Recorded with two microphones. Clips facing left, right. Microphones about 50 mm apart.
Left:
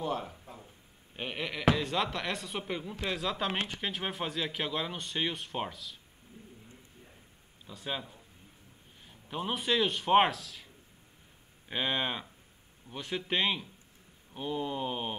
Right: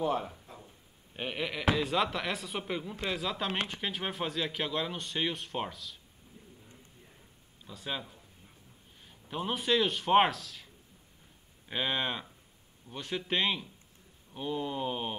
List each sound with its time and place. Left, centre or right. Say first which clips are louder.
0.0 s speech: right 3 dB; centre
7.6 s a man's voice: even; centre
11.7 s speech: even; centre